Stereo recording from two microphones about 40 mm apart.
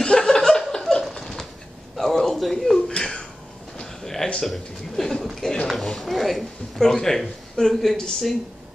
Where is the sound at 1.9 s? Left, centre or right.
Centre.